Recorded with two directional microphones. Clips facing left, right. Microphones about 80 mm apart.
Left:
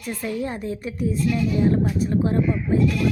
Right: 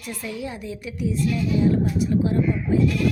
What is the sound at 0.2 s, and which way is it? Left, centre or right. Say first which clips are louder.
A woman's voice: left 5 dB; left.